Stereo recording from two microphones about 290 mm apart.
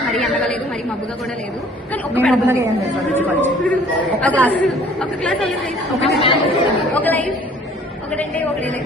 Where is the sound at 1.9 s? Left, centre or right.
Centre.